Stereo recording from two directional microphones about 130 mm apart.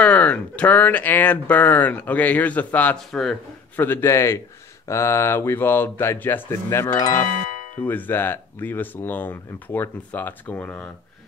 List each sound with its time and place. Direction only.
0.0 s speech: 10° left (ahead or behind)
3.7 s speech: 15° left (ahead or behind)
7.1 s speech: 80° left
7.8 s speech: 15° left (ahead or behind)